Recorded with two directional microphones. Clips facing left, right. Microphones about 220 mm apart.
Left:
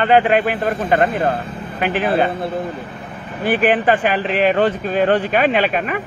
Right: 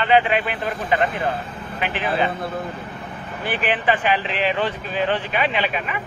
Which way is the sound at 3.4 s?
45° left (ahead or behind).